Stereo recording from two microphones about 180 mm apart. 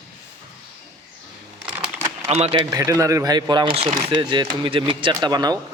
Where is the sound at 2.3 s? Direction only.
35° right (ahead or behind).